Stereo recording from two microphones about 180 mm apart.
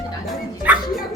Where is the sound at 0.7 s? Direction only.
10° right (ahead or behind).